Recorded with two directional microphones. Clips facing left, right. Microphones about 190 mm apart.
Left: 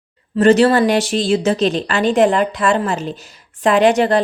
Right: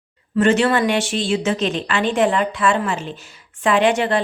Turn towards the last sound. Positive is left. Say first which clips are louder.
# left 4 dB
turn(degrees=40)  # may be behind; listen again after turning